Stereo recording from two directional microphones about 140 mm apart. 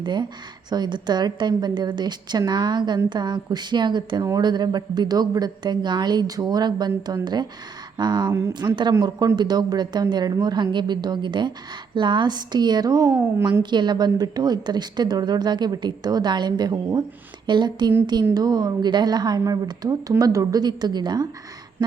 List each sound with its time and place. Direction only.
0.0 s a woman's voice: 35° right (ahead or behind)